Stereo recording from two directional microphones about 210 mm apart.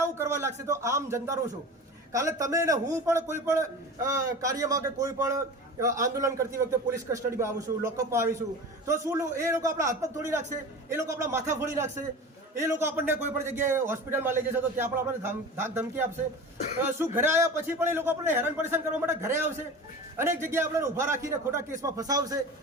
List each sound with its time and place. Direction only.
0.0 s a man's voice: 15° right (ahead or behind)